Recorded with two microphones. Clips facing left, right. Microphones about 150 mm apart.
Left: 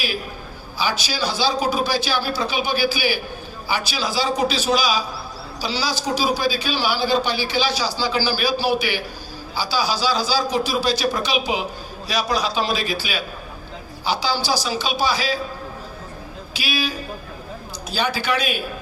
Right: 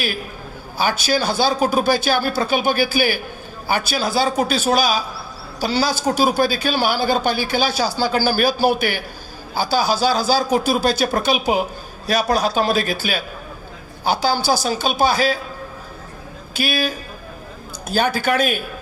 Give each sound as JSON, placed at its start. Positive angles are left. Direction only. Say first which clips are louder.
{"t": 0.8, "sound": "speech", "louder": "right 4 dB", "side_deg": -50}
{"t": 16.6, "sound": "speech", "louder": "right 4 dB", "side_deg": -50}